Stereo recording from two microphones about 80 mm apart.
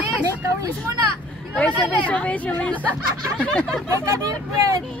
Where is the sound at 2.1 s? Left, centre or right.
Centre.